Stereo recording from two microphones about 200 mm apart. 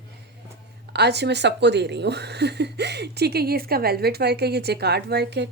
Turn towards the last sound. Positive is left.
turn(degrees=-55)  # may be behind; listen again after turning